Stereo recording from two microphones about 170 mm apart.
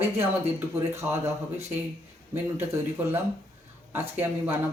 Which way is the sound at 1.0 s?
15° right (ahead or behind).